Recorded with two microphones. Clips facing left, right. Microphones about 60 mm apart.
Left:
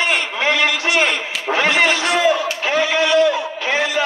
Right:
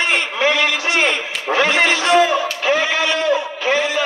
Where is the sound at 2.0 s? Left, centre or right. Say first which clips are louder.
Right 2 dB; right.